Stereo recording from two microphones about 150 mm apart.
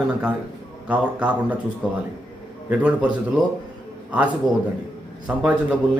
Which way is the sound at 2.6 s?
10° right (ahead or behind).